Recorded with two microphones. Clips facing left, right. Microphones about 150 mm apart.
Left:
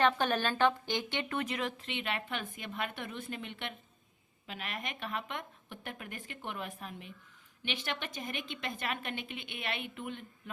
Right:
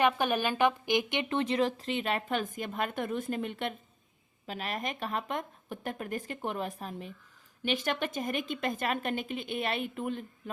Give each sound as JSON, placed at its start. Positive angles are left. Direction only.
{"t": 0.0, "sound": "speech", "side_deg": -10}